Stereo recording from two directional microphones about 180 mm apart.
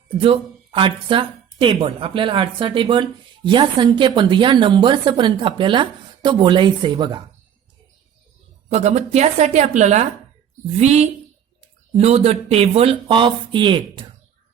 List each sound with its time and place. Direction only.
0.2 s a woman's voice: 30° right (ahead or behind)
8.7 s speech: 40° right (ahead or behind)